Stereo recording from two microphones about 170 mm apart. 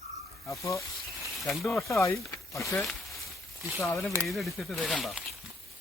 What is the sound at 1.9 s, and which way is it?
Speech, 15° left (ahead or behind).